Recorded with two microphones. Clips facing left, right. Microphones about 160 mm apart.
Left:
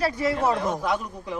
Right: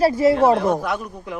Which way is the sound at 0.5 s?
65° right (ahead or behind).